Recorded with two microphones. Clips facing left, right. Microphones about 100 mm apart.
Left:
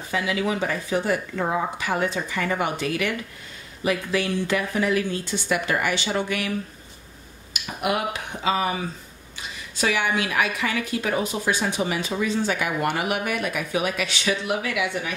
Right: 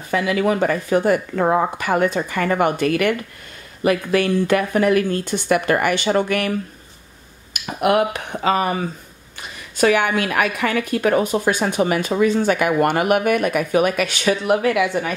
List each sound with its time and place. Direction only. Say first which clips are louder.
0.1 s a woman's voice: right 6 dB; 55° right (ahead or behind)
7.8 s speech: right 8 dB; 60° right (ahead or behind)
9.8 s a woman's voice: right 7 dB; 50° right (ahead or behind)